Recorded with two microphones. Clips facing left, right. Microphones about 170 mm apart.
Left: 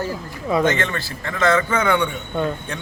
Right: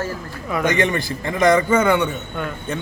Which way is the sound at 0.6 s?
15° right (ahead or behind).